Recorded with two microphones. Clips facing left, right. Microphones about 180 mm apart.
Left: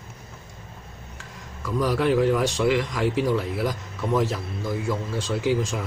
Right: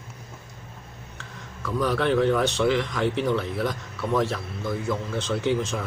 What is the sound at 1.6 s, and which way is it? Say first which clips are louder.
A man's voice: left 1 dB; 10° left (ahead or behind).